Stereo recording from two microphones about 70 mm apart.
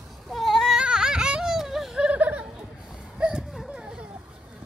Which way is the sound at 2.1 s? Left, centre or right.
Right.